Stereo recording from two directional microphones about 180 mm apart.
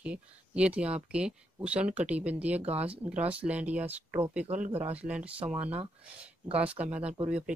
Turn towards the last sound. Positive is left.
turn(degrees=-10)  # may be behind; listen again after turning